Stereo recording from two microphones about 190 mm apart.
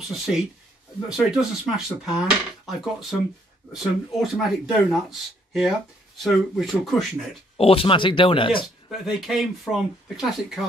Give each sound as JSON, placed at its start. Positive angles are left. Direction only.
{"t": 1.0, "sound": "speech", "side_deg": -5}
{"t": 7.5, "sound": "speech", "side_deg": 30}
{"t": 9.0, "sound": "speech", "side_deg": 0}